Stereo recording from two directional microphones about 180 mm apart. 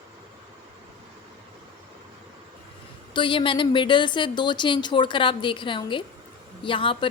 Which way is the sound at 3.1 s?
30° left (ahead or behind).